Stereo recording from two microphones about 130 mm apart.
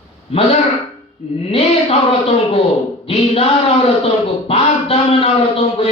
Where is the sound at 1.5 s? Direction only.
50° left (ahead or behind).